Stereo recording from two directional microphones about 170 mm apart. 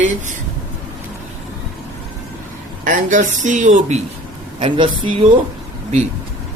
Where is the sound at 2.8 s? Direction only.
50° right (ahead or behind).